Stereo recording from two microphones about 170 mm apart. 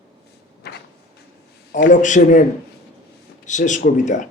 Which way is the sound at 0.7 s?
70° left (ahead or behind).